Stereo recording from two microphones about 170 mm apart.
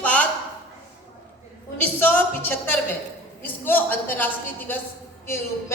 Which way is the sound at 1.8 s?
10° left (ahead or behind).